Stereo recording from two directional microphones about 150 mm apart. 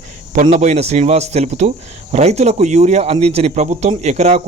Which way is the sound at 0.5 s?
50° right (ahead or behind).